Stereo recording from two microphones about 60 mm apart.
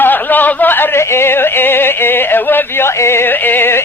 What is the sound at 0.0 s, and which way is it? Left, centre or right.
Yodeling, left.